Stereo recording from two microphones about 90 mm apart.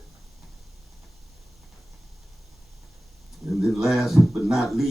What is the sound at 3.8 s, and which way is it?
Speech, 5° right (ahead or behind).